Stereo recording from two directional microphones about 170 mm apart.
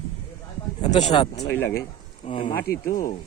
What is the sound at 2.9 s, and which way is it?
Speech, 50° left (ahead or behind).